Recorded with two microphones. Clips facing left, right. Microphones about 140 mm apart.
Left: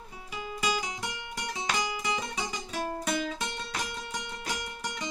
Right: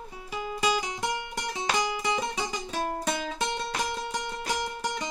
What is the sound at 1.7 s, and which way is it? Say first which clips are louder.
Music: right 4 dB; 30° right (ahead or behind).